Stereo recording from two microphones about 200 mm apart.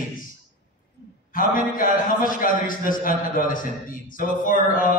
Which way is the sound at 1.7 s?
45° left (ahead or behind).